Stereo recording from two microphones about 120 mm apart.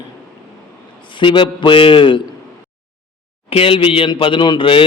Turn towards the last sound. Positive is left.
turn(degrees=45)  # may be behind; listen again after turning